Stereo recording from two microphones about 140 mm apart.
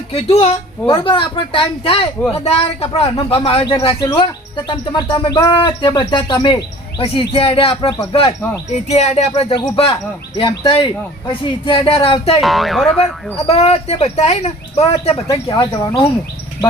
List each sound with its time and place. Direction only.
0.1 s speech: 45° left (ahead or behind)
12.4 s speech: centre (ahead or behind)
13.5 s speech: 50° left (ahead or behind)
15.7 s speech: 30° left (ahead or behind)